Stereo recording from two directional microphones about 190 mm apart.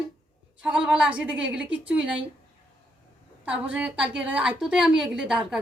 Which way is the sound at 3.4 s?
5° right (ahead or behind).